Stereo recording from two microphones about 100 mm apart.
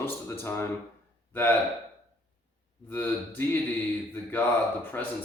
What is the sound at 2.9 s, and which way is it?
Speech, 15° left (ahead or behind).